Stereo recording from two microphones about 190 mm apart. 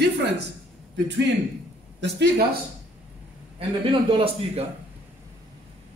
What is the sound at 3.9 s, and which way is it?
Speech, 25° right (ahead or behind).